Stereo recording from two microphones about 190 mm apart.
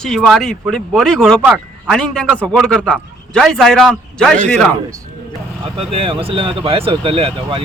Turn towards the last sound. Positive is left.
turn(degrees=-30)  # may be behind; listen again after turning